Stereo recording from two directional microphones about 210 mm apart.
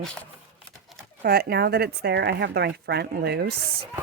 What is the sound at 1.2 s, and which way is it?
Speech, 50° right (ahead or behind).